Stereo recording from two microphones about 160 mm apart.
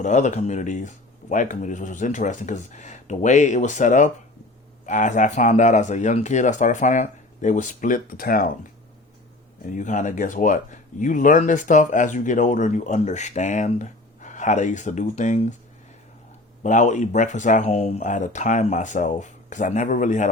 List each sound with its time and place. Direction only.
0.0 s speech: 50° left (ahead or behind); by 8.4 s 65° left (ahead or behind)
9.6 s speech: 50° left (ahead or behind)
16.6 s speech: 50° left (ahead or behind)